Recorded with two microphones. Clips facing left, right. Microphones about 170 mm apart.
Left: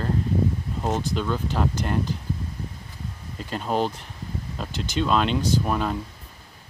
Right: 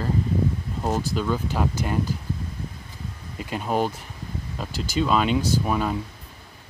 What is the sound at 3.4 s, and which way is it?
Speech, 5° right (ahead or behind).